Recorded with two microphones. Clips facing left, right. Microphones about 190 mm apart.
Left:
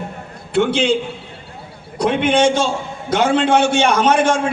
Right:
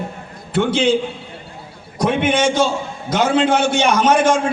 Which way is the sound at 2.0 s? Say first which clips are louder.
Left 2 dB; 60° left (ahead or behind).